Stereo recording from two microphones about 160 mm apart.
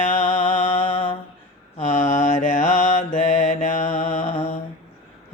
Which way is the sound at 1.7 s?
55° left (ahead or behind).